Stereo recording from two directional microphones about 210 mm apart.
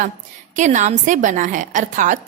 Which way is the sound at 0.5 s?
35° right (ahead or behind).